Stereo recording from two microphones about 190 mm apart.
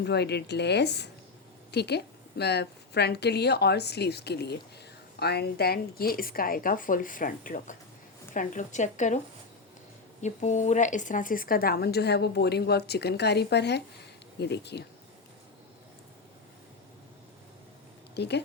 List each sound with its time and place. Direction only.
0.0 s a woman's voice: 60° left (ahead or behind)
18.1 s speech: 60° left (ahead or behind)